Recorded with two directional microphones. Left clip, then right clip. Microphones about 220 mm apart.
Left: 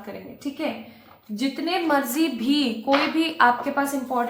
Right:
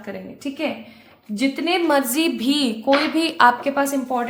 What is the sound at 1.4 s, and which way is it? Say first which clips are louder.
A woman's voice: right 5 dB; 45° right (ahead or behind).